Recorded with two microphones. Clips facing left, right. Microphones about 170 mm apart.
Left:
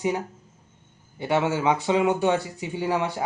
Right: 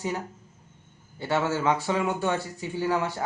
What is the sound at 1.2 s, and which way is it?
Speech, 15° left (ahead or behind).